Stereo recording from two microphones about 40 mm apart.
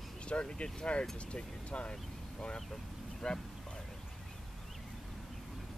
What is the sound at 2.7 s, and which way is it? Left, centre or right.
Speech, centre.